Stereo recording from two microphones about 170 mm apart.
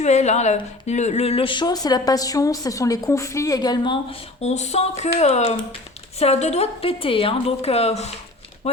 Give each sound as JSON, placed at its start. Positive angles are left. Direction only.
{"t": 0.0, "sound": "speech", "side_deg": 40}
{"t": 4.4, "sound": "a woman's voice", "side_deg": 40}